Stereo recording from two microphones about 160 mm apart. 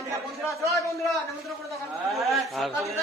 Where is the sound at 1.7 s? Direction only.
Centre (ahead or behind).